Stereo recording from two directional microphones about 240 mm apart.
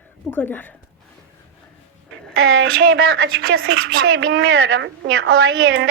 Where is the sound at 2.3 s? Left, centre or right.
Right.